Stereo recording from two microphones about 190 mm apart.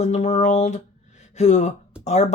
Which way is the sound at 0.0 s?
40° left (ahead or behind).